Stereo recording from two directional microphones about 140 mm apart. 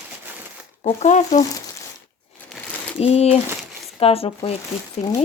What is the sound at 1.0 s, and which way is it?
Speech, 60° left (ahead or behind).